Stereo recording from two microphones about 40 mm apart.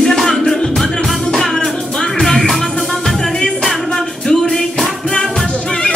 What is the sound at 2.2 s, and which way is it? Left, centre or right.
Music, centre.